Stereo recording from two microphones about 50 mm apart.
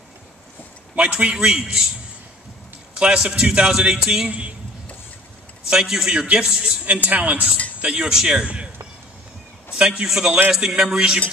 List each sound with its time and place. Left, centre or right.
0.9 s a man's voice: right
3.0 s a man's voice: centre
5.7 s a man's voice: centre
6.1 s a man's voice: right
6.9 s a man's voice: right
9.8 s a man's voice: centre